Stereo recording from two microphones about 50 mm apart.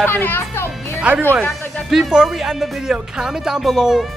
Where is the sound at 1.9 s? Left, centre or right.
Centre.